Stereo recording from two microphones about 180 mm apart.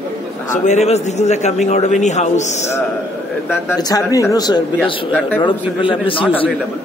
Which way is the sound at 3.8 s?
20° left (ahead or behind).